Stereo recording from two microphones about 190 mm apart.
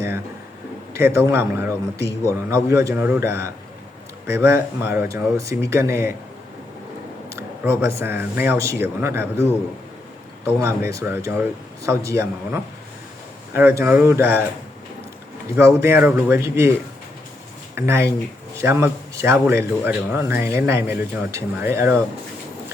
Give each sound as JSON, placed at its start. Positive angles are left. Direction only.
{"t": 0.9, "sound": "speech", "side_deg": -15}
{"t": 7.3, "sound": "a sound", "side_deg": -15}
{"t": 8.4, "sound": "speech", "side_deg": -15}
{"t": 15.5, "sound": "speech", "side_deg": -15}
{"t": 17.7, "sound": "speech", "side_deg": -15}